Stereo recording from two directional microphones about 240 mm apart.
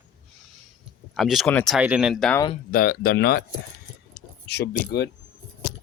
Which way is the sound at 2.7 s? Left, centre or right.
Left.